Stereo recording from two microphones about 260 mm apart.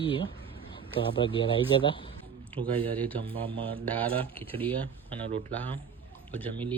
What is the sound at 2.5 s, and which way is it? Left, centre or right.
Speech, right.